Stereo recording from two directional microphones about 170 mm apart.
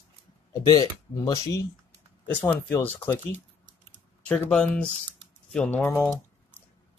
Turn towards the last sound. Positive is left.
turn(degrees=15)  # may be behind; listen again after turning